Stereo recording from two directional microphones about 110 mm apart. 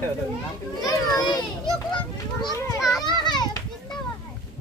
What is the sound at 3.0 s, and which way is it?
Children playing, 40° left (ahead or behind).